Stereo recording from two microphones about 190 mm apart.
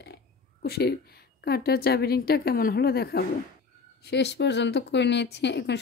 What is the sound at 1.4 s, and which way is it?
Speech, 55° left (ahead or behind).